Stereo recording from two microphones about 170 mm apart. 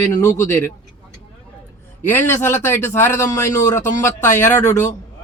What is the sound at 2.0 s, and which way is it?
A man's voice, 15° left (ahead or behind).